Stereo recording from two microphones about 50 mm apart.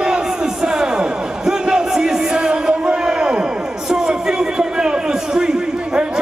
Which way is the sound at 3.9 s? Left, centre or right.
Centre.